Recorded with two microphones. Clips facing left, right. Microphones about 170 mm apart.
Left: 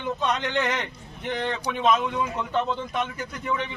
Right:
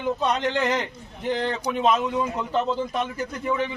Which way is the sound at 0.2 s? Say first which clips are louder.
Right 2 dB; 35° right (ahead or behind).